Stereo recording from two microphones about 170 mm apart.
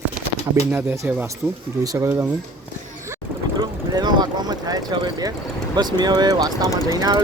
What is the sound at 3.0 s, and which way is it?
Mechanisms, 20° right (ahead or behind).